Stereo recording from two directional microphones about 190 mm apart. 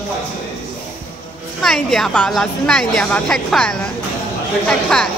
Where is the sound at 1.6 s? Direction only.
Centre (ahead or behind).